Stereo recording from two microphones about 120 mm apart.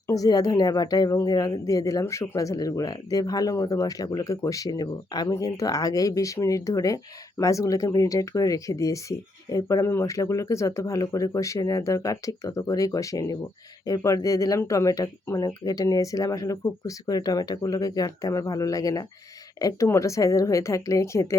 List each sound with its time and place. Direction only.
0.1 s a woman's voice: 30° left (ahead or behind)